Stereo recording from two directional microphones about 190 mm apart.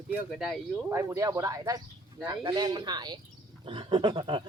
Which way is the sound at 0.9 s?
15° right (ahead or behind).